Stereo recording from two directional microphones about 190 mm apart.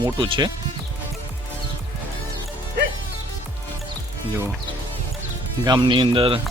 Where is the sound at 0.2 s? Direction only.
25° right (ahead or behind).